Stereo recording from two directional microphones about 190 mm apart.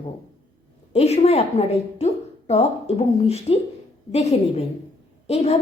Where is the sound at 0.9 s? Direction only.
35° left (ahead or behind).